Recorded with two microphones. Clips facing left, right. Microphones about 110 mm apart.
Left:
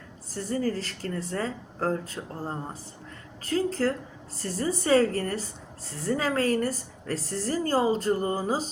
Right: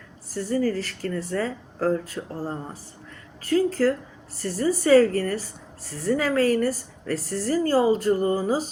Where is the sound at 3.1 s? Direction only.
30° left (ahead or behind).